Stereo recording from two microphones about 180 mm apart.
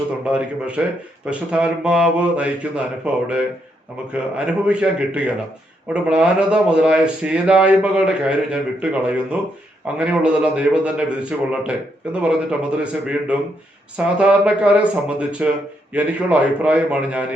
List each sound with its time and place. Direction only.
0.3 s a man's voice: 5° right (ahead or behind)